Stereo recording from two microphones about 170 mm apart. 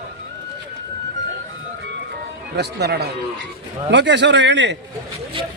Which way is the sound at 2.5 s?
75° right (ahead or behind).